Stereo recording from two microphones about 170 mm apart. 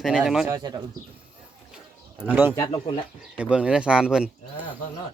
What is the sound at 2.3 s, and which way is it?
Speech, 10° right (ahead or behind).